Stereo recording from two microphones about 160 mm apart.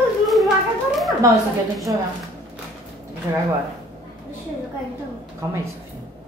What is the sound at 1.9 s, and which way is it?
Speech, 20° right (ahead or behind).